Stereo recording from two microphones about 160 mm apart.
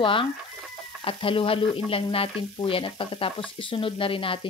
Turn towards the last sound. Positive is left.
turn(degrees=35)  # may be behind; listen again after turning